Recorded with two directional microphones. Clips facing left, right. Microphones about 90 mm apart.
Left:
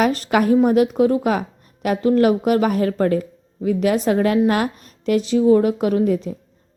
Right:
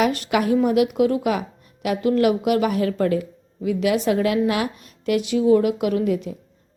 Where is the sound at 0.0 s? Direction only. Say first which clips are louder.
Left 3 dB; 40° left (ahead or behind).